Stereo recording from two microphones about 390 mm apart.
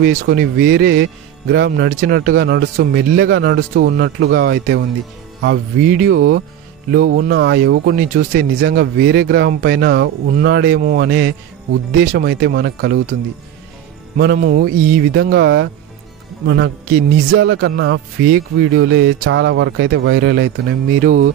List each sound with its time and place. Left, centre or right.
0.0 s speech: right
14.1 s speech: right